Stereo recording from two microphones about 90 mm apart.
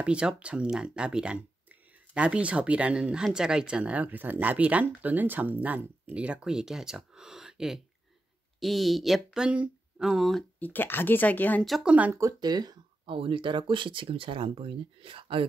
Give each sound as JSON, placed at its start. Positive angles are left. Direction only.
{"t": 0.0, "sound": "speech", "side_deg": -10}
{"t": 10.6, "sound": "speech", "side_deg": 20}
{"t": 11.6, "sound": "speech", "side_deg": 0}
{"t": 12.1, "sound": "speech", "side_deg": -35}
{"t": 12.4, "sound": "speech", "side_deg": -50}
{"t": 13.0, "sound": "speech", "side_deg": -75}